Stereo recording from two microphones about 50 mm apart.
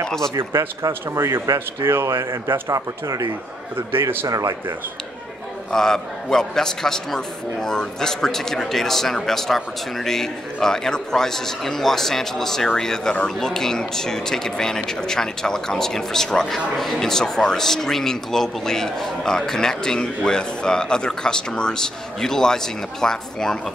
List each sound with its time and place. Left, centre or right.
0.4 s speech: right
3.9 s a man's voice: right
5.7 s speech: centre